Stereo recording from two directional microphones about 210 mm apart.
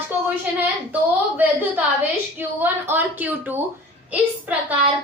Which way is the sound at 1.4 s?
10° right (ahead or behind).